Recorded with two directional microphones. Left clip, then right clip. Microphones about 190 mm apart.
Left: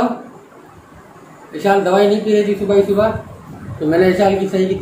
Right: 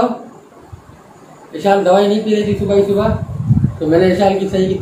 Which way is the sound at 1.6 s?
5° right (ahead or behind).